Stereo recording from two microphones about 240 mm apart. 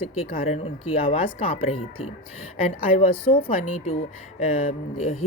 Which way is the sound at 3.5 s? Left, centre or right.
Left.